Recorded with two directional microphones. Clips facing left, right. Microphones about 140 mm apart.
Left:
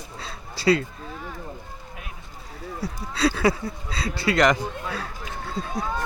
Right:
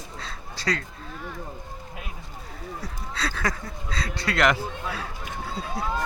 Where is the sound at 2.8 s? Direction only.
10° left (ahead or behind).